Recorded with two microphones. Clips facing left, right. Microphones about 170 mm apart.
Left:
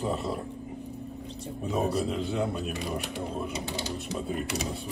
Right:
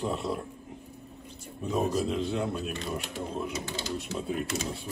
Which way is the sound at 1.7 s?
Centre (ahead or behind).